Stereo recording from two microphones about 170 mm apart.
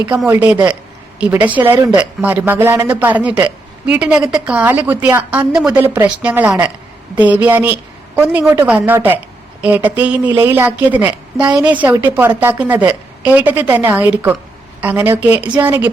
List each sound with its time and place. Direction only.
0.3 s a woman's voice: 10° right (ahead or behind)